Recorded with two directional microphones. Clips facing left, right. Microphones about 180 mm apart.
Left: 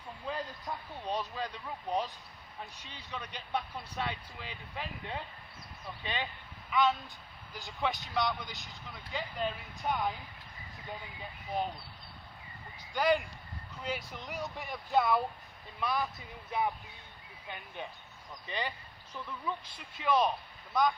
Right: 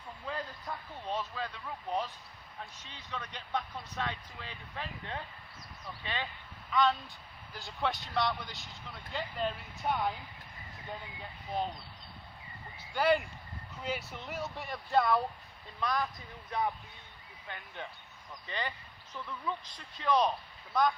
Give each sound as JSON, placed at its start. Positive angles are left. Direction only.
{"t": 0.3, "sound": "speech", "side_deg": 15}
{"t": 6.7, "sound": "speech", "side_deg": 5}
{"t": 12.9, "sound": "speech", "side_deg": -5}